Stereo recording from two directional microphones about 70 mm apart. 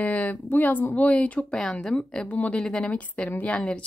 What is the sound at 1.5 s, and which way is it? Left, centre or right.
A woman's voice, centre.